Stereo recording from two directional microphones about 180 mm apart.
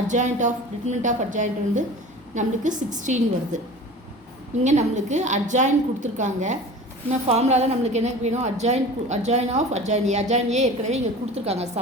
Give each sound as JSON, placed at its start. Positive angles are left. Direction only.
{"t": 0.1, "sound": "a woman's voice", "side_deg": -45}
{"t": 4.6, "sound": "a woman's voice", "side_deg": -40}